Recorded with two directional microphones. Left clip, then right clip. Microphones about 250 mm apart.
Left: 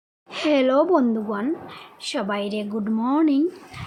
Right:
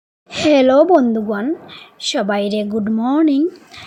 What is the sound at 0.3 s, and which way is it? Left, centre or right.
A woman's voice, centre.